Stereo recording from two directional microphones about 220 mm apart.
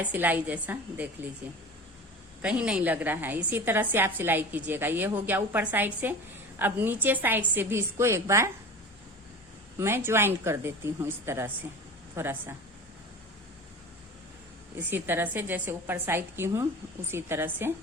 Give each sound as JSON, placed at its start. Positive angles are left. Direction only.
{"t": 0.0, "sound": "a woman's voice", "side_deg": -10}
{"t": 2.4, "sound": "a woman's voice", "side_deg": -5}
{"t": 9.7, "sound": "a woman's voice", "side_deg": -10}
{"t": 14.8, "sound": "a woman's voice", "side_deg": -10}